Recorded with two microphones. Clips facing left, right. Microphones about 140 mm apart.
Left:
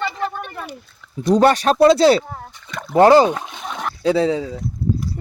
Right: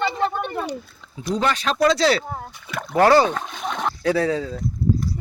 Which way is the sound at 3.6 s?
Centre (ahead or behind).